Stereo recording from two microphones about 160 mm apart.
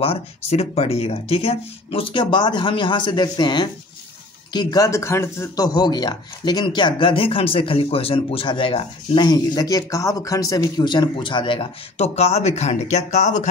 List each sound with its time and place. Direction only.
0.0 s a man's voice: 40° left (ahead or behind)